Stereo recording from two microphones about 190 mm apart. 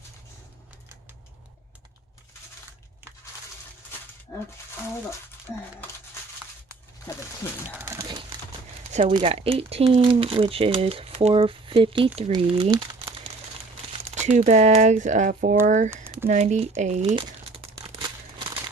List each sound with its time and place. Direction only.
5.5 s speech: 15° left (ahead or behind)
7.9 s a sound: 25° right (ahead or behind)
8.9 s speech: 35° right (ahead or behind)
14.2 s speech: 40° right (ahead or behind)
17.1 s crumpling: 25° right (ahead or behind)